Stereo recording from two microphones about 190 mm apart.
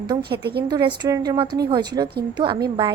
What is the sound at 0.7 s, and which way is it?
A woman's voice, 20° right (ahead or behind).